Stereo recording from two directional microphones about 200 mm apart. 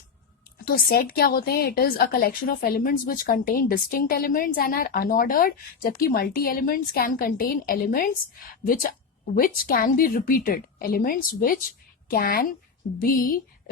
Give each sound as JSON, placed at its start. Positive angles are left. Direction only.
{"t": 0.6, "sound": "a woman's voice", "side_deg": 50}